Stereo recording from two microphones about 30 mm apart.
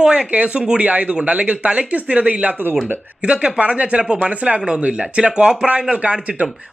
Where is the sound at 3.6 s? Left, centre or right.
Right.